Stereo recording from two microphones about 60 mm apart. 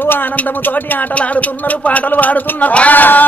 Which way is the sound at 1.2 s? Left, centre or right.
Left.